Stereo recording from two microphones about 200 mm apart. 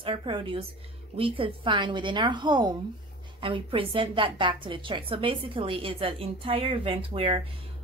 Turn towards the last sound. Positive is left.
turn(degrees=-30)  # may be behind; listen again after turning